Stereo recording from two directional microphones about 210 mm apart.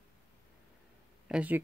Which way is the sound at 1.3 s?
5° right (ahead or behind).